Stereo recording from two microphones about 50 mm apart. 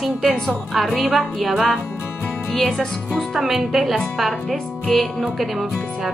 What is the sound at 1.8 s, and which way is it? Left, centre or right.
Music, left.